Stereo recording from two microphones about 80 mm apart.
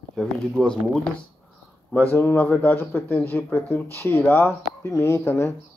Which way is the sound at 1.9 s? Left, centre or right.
Left.